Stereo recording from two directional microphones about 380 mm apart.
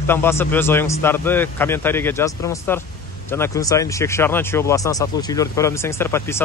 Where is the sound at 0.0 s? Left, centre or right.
Centre.